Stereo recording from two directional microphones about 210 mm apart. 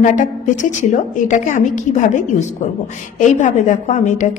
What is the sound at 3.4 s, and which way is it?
Speech, 35° left (ahead or behind).